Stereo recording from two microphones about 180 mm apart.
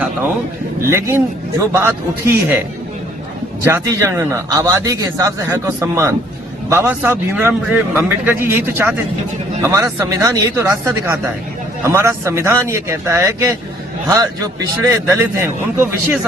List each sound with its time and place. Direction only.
0.9 s a man's voice: 15° right (ahead or behind)
3.6 s a man's voice: 15° right (ahead or behind)